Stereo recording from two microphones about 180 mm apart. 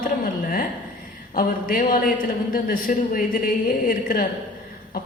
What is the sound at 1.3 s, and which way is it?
A man's voice, 50° left (ahead or behind).